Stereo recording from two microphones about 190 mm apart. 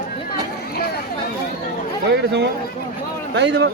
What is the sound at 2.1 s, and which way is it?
Speech, 65° right (ahead or behind).